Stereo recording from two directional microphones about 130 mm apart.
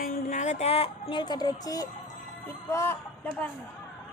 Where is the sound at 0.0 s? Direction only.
90° left; by 1.9 s 30° left (ahead or behind).